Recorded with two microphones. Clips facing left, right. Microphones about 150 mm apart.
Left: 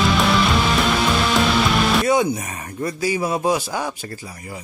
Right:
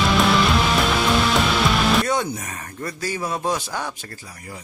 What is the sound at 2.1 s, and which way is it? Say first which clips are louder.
Speech: left 5 dB; 10° left (ahead or behind).